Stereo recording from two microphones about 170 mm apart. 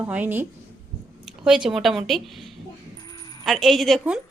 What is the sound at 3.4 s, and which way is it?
Speech, centre (ahead or behind).